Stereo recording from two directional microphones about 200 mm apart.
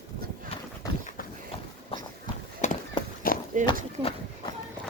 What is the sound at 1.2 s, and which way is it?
Clip-clop, 45° left (ahead or behind).